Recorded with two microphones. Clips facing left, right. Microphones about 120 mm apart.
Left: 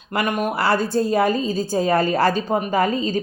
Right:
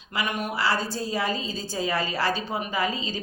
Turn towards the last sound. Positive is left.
turn(degrees=50)  # may be behind; listen again after turning